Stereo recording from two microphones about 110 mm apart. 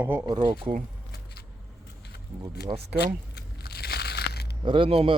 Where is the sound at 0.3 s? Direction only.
45° right (ahead or behind).